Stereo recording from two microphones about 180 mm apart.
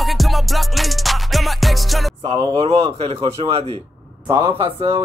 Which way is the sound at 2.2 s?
30° right (ahead or behind).